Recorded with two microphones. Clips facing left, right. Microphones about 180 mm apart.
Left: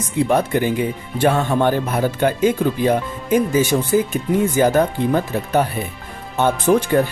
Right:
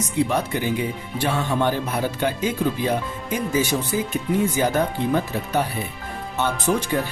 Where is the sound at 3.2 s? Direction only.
50° left (ahead or behind).